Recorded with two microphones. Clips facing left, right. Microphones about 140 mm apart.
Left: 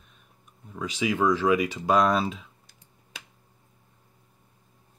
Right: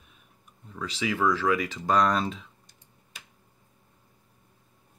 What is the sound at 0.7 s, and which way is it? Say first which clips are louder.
Speech: left 3 dB; 15° left (ahead or behind).